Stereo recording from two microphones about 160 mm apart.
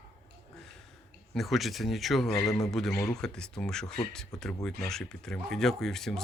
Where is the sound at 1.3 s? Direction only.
Centre (ahead or behind).